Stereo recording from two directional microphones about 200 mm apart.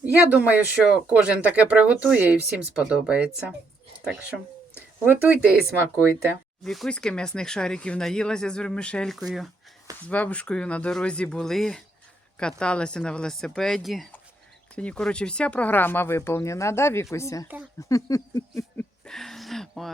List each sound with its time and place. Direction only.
0.0 s speech: 5° right (ahead or behind)
6.7 s speech: 5° left (ahead or behind)
19.0 s speech: centre (ahead or behind)